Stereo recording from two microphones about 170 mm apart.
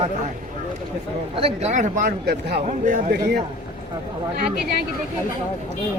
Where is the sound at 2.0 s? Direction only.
65° right (ahead or behind).